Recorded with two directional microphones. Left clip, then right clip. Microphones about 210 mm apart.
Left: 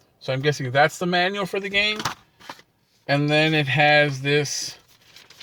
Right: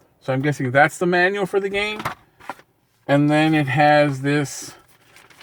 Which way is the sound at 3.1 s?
20° right (ahead or behind).